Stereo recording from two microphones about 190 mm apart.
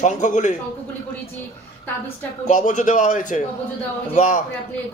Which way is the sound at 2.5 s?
40° left (ahead or behind).